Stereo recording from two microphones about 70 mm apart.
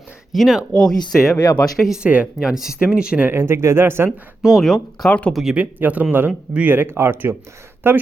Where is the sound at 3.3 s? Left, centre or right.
Right.